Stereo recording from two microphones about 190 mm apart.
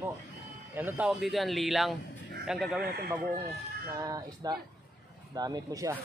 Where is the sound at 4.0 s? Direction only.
20° right (ahead or behind).